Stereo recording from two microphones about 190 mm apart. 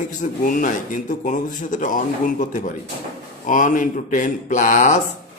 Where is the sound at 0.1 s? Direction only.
45° left (ahead or behind).